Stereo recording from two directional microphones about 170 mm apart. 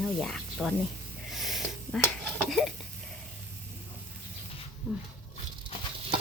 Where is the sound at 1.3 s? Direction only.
Centre (ahead or behind).